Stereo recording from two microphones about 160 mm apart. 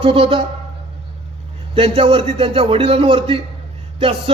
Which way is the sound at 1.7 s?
40° right (ahead or behind).